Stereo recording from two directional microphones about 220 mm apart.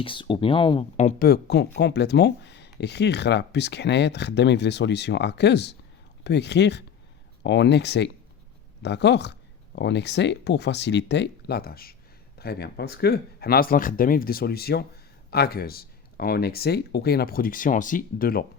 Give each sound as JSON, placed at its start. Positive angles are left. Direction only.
{"t": 0.0, "sound": "speech", "side_deg": 25}